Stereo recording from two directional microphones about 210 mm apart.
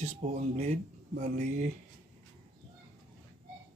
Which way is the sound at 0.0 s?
35° right (ahead or behind).